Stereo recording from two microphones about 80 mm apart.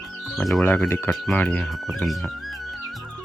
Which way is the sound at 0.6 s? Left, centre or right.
Left.